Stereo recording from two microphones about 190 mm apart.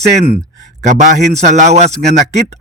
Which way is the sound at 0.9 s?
40° right (ahead or behind).